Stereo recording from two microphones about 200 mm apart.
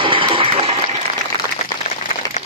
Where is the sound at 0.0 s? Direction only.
25° right (ahead or behind).